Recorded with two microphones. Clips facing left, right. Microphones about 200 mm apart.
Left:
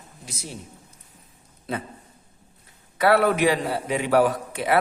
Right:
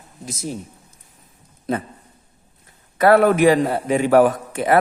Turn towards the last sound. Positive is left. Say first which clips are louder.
# right 5 dB
turn(degrees=-50)  # may be behind; listen again after turning